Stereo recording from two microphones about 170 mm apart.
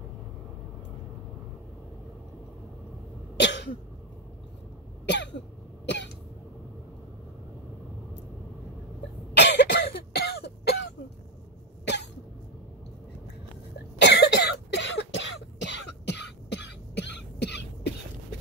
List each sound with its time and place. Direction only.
3.3 s cough: 90° left
5.0 s cough: 90° left
9.4 s cough: 90° left
11.8 s cough: 90° left
13.9 s cough: 80° left